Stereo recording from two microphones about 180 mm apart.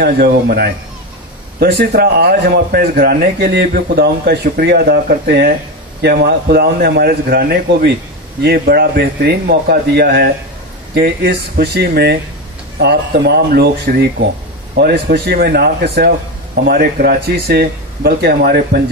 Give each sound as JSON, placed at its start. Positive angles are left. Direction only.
{"t": 0.0, "sound": "a man's voice", "side_deg": -60}